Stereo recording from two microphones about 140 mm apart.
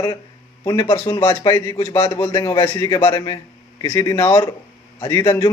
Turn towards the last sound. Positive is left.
turn(degrees=30)  # may be behind; listen again after turning